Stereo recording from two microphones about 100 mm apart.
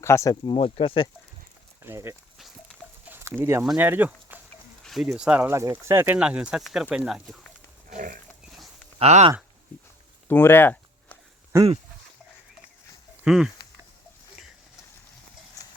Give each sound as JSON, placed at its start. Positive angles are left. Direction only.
{"t": 0.0, "sound": "speech", "side_deg": 30}
{"t": 0.5, "sound": "speech", "side_deg": 65}
{"t": 1.8, "sound": "speech", "side_deg": -25}
{"t": 3.1, "sound": "a sound", "side_deg": -25}
{"t": 3.8, "sound": "speech", "side_deg": -20}
{"t": 4.8, "sound": "speech", "side_deg": 0}
{"t": 5.5, "sound": "speech", "side_deg": -30}
{"t": 6.1, "sound": "speech", "side_deg": -10}
{"t": 9.0, "sound": "speech", "side_deg": -90}
{"t": 10.2, "sound": "a sound", "side_deg": 20}
{"t": 13.2, "sound": "speech", "side_deg": -5}
{"t": 15.6, "sound": "clip-clop", "side_deg": 35}